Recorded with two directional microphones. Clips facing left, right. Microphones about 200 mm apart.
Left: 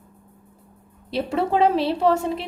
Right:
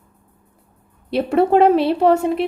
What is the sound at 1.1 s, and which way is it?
A woman's voice, 60° right (ahead or behind).